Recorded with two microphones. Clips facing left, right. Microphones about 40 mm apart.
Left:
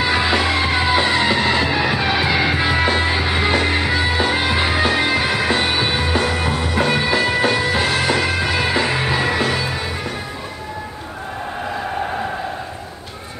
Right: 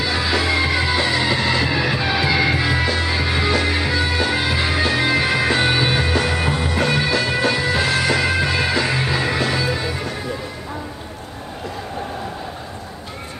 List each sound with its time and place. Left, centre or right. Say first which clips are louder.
0.0 s music: left 3 dB; left; by 6.5 s centre
6.7 s music: left 3 dB; left